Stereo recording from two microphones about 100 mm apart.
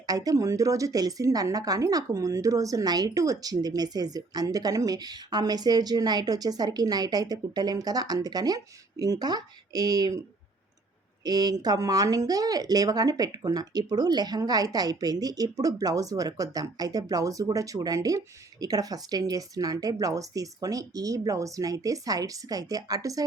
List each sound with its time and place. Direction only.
0.0 s a woman's voice: 40° right (ahead or behind)
11.2 s a woman's voice: 40° right (ahead or behind)